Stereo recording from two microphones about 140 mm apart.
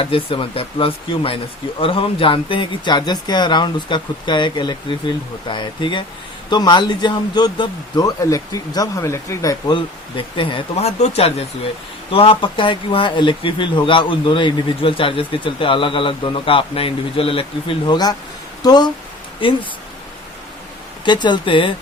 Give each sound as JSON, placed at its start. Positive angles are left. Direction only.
{"t": 0.0, "sound": "speech", "side_deg": 40}
{"t": 21.0, "sound": "speech", "side_deg": 35}